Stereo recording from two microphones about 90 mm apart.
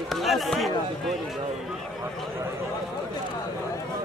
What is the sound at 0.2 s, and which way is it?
Speech, centre (ahead or behind).